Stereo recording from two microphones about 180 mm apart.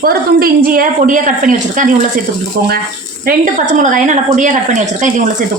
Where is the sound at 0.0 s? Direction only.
55° right (ahead or behind).